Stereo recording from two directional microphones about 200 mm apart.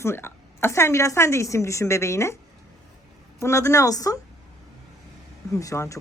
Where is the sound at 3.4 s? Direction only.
15° left (ahead or behind).